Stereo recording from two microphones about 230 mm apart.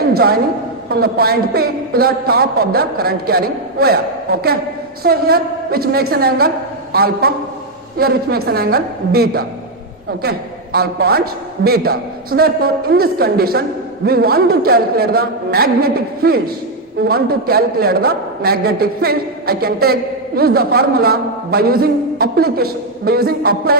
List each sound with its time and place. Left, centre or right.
0.1 s a woman's voice: right